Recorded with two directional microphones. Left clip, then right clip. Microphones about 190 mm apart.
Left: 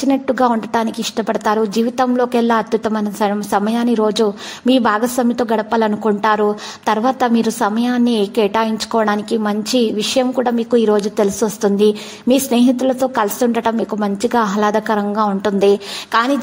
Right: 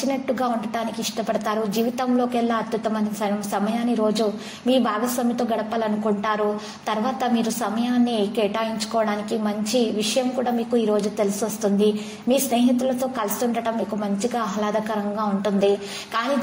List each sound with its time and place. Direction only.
0.1 s a woman's voice: 40° left (ahead or behind)